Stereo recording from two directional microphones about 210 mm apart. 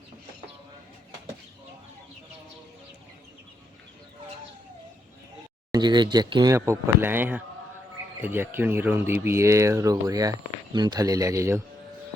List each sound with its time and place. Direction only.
5.7 s speech: 20° right (ahead or behind)